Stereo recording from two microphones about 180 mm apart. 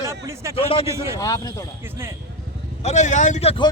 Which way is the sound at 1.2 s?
20° left (ahead or behind).